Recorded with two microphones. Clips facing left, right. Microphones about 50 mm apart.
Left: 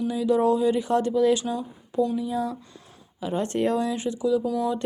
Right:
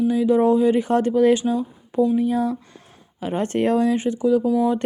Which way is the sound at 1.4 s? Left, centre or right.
Centre.